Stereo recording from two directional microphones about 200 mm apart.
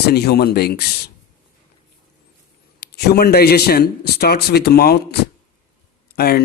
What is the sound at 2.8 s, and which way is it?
A man's voice, 50° left (ahead or behind).